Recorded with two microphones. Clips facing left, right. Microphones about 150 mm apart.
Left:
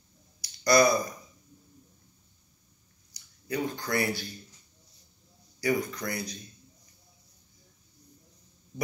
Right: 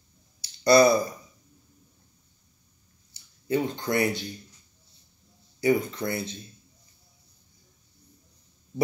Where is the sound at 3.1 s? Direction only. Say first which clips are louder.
Right 6 dB; 25° right (ahead or behind).